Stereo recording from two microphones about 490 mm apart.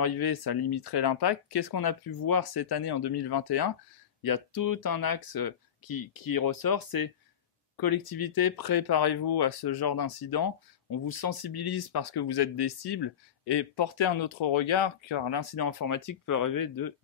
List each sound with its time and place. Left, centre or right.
0.0 s speech: left